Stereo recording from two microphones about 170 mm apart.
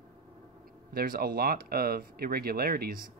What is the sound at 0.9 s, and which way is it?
Speech, 60° right (ahead or behind).